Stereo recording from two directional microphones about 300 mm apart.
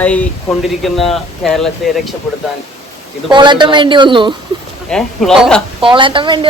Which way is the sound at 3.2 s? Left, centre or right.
Centre.